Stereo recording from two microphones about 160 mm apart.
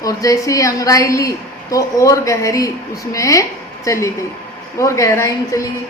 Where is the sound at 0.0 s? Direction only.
20° left (ahead or behind).